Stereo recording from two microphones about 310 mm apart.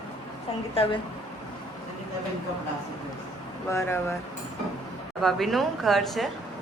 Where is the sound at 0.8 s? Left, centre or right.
Centre.